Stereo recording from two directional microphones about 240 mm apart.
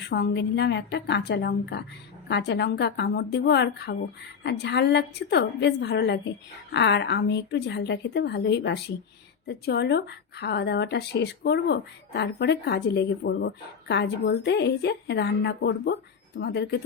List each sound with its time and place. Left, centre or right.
0.1 s speech: left